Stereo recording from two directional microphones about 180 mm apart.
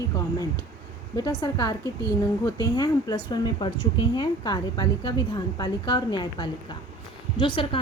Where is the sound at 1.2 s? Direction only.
20° left (ahead or behind).